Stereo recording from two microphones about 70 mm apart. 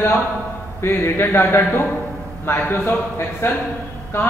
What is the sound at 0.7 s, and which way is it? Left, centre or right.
A man's voice, left.